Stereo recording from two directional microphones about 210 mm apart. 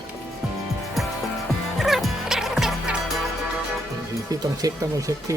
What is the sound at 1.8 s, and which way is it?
Music, centre (ahead or behind).